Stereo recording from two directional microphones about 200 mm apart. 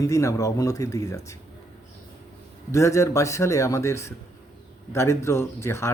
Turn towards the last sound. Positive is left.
turn(degrees=15)  # may be behind; listen again after turning